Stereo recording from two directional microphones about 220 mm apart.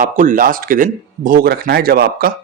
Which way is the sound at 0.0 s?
35° right (ahead or behind).